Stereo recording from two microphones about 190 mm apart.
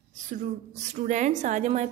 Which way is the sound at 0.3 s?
40° right (ahead or behind).